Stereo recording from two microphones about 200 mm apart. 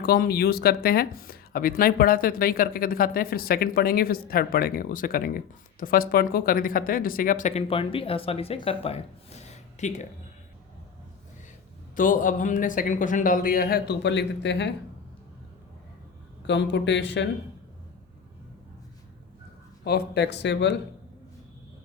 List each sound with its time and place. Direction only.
0.0 s speech: 50° left (ahead or behind)
11.9 s speech: 40° left (ahead or behind); by 14.7 s 60° left (ahead or behind)
16.5 s speech: 60° left (ahead or behind)
19.8 s speech: 55° left (ahead or behind)